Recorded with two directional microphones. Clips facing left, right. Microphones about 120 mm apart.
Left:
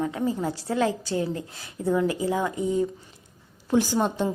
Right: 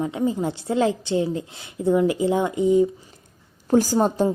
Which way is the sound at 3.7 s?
40° right (ahead or behind).